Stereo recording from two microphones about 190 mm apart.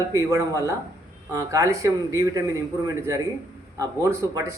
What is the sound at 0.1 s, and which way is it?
A man's voice, 15° right (ahead or behind).